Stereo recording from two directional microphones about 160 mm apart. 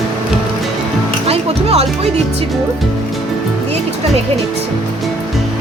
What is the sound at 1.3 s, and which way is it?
Music, 40° right (ahead or behind).